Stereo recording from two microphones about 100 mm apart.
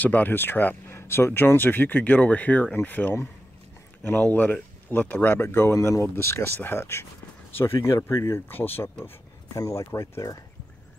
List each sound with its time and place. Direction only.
0.0 s speech: 15° left (ahead or behind)
9.5 s speech: 35° left (ahead or behind)